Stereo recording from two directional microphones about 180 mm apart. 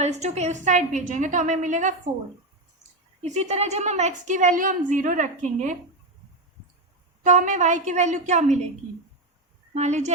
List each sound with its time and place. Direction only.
0.0 s a woman's voice: 40° right (ahead or behind)
3.2 s a woman's voice: 40° right (ahead or behind)
7.2 s a woman's voice: 45° right (ahead or behind)
9.7 s speech: 40° right (ahead or behind)